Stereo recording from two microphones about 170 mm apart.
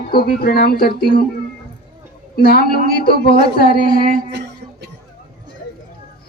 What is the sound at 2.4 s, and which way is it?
A woman's voice, 65° left (ahead or behind).